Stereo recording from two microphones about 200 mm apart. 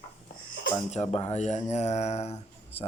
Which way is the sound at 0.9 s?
35° left (ahead or behind).